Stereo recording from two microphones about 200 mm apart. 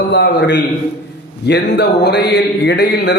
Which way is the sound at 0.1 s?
60° left (ahead or behind).